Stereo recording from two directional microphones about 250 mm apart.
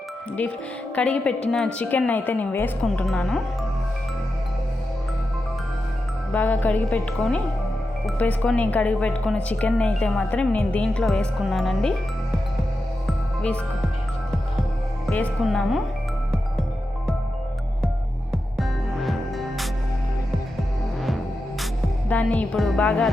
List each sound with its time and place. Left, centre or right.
0.9 s speech: centre
6.3 s speech: centre
13.1 s music: centre
15.1 s speech: centre
18.3 s music: centre
22.1 s speech: centre